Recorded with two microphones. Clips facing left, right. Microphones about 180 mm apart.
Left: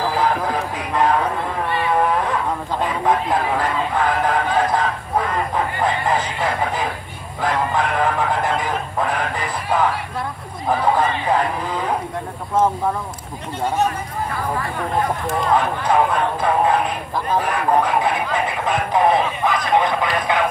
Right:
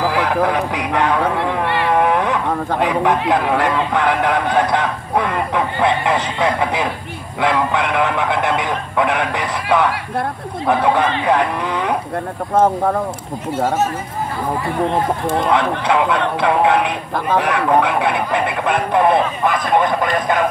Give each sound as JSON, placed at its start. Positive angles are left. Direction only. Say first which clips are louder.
{"t": 0.0, "sound": "speech", "louder": "right 3 dB", "side_deg": -75}
{"t": 14.9, "sound": "speech", "louder": "right 3 dB", "side_deg": -75}